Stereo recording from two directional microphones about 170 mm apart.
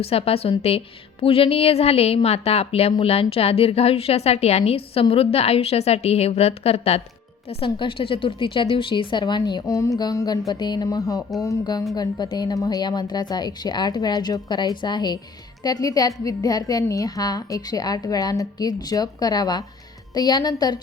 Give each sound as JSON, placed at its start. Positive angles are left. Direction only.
{"t": 0.0, "sound": "a woman's voice", "side_deg": 35}